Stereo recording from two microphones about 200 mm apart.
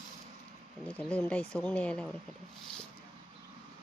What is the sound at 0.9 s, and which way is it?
Speech, 5° left (ahead or behind).